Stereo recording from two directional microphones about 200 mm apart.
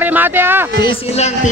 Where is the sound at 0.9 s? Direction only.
35° left (ahead or behind).